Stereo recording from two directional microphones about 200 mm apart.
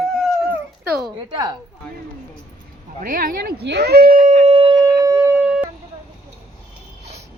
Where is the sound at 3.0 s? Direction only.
45° right (ahead or behind); by 5.7 s 5° right (ahead or behind).